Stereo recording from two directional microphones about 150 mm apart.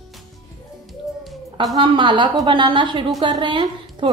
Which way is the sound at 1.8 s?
30° right (ahead or behind).